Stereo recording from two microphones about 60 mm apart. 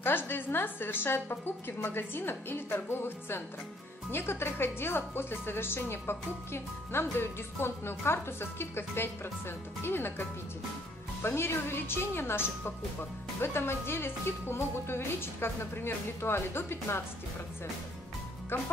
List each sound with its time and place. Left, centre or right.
0.0 s speech: left
11.2 s speech: left
18.5 s speech: left